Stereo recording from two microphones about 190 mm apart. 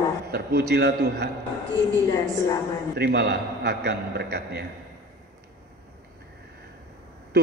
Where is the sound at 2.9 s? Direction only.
55° right (ahead or behind).